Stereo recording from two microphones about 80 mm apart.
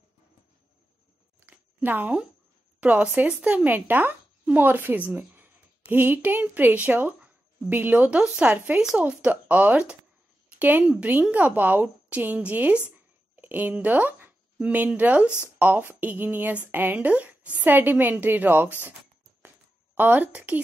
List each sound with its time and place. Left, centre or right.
1.4 s a sound: right
2.8 s a woman's voice: centre
20.0 s speech: right